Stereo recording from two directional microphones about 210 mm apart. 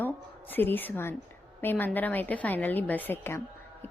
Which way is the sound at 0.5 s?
10° left (ahead or behind).